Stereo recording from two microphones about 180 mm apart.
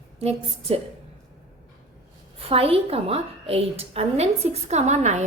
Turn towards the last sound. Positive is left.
turn(degrees=-40)  # may be behind; listen again after turning